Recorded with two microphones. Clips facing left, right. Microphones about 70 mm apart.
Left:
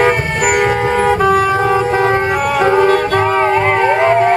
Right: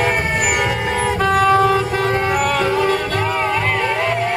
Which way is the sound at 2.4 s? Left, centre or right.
Centre.